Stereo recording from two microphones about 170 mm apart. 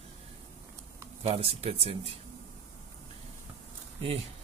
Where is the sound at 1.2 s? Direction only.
35° right (ahead or behind).